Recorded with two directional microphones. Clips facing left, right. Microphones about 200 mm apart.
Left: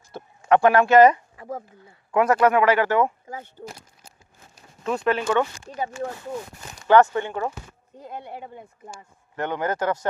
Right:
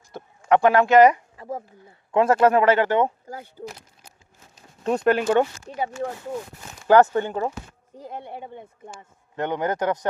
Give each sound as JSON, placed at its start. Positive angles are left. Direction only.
{"t": 0.1, "sound": "speech", "side_deg": -15}
{"t": 1.4, "sound": "speech", "side_deg": -25}
{"t": 4.8, "sound": "speech", "side_deg": -40}
{"t": 6.8, "sound": "speech", "side_deg": -35}
{"t": 8.2, "sound": "speech", "side_deg": 5}
{"t": 9.3, "sound": "a man's voice", "side_deg": -20}